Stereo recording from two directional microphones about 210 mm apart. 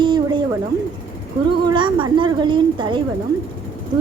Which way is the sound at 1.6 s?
25° right (ahead or behind).